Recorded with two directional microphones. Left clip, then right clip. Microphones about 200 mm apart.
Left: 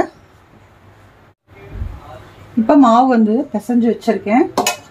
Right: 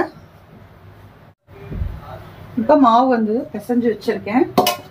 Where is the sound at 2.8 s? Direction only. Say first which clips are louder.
Left 4 dB; 55° left (ahead or behind).